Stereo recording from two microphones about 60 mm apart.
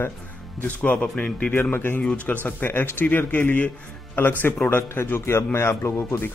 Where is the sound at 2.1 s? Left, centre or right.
Left.